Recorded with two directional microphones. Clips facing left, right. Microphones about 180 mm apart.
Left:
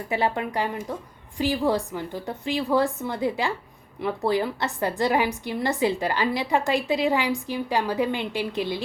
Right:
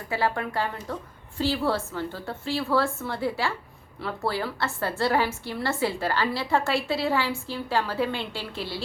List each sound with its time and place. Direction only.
0.1 s a woman's voice: 20° left (ahead or behind)